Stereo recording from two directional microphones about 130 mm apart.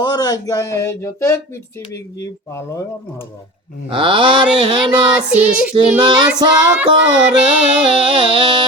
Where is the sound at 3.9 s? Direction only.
40° right (ahead or behind).